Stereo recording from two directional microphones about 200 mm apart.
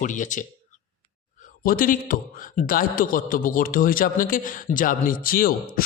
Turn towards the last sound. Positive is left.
turn(degrees=45)  # may be behind; listen again after turning